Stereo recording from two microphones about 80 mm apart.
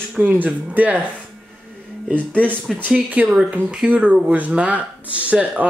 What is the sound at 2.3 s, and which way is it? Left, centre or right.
Speech, right.